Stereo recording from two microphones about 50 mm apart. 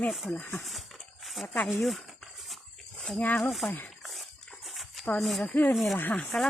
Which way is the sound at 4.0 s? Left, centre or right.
Centre.